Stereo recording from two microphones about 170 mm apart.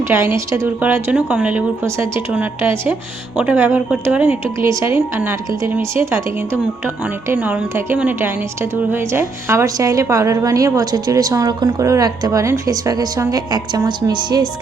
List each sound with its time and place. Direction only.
0.0 s speech: 15° right (ahead or behind)